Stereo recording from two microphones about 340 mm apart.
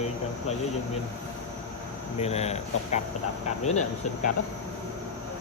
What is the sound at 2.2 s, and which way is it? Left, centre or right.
Speech, centre.